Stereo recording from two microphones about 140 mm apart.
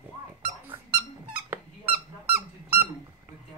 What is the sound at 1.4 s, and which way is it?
Squeak, 15° right (ahead or behind).